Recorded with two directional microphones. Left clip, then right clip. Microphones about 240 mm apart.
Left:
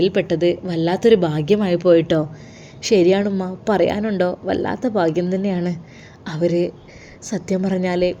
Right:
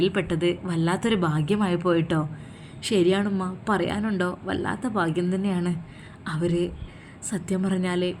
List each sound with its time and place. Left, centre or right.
0.0 s a woman's voice: centre